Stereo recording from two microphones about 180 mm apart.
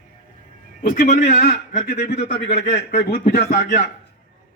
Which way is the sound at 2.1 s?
40° left (ahead or behind).